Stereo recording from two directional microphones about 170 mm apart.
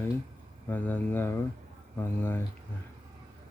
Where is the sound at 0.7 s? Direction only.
10° left (ahead or behind).